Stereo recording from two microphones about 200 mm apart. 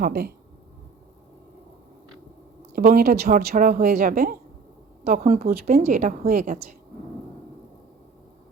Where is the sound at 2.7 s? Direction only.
45° right (ahead or behind).